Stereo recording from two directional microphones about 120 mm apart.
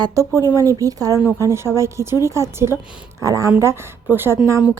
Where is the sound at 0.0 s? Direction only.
25° right (ahead or behind).